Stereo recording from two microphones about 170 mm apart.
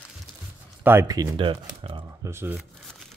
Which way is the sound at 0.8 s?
15° right (ahead or behind).